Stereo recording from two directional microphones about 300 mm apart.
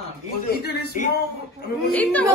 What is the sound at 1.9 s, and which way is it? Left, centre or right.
Speech, centre.